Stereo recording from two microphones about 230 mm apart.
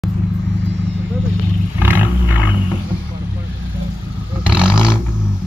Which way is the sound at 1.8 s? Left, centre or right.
Centre.